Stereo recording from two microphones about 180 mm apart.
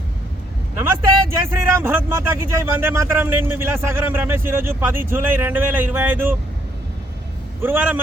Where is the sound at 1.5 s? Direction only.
15° right (ahead or behind).